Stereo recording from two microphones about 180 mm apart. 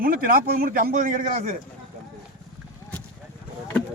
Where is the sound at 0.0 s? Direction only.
50° right (ahead or behind).